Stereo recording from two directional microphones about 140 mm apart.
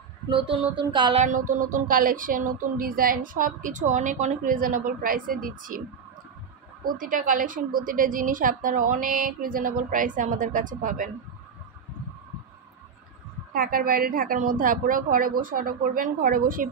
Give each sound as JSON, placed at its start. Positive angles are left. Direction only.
{"t": 0.3, "sound": "a sound", "side_deg": -40}
{"t": 1.2, "sound": "speech", "side_deg": -65}
{"t": 6.8, "sound": "speech", "side_deg": -85}
{"t": 13.5, "sound": "a woman's voice", "side_deg": -90}